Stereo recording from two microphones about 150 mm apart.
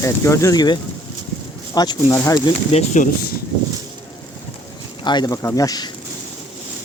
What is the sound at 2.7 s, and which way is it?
Speech, 55° left (ahead or behind).